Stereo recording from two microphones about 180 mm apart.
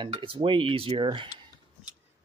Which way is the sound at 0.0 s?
25° right (ahead or behind).